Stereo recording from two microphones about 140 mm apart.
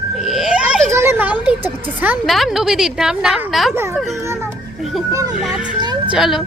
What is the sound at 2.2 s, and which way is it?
A woman's voice, centre (ahead or behind).